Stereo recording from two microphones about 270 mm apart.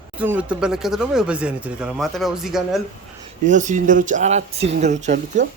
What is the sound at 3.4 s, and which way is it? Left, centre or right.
Speech, right.